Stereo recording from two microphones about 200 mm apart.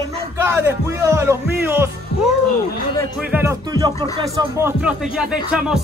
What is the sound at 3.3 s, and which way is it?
Speech, 15° right (ahead or behind).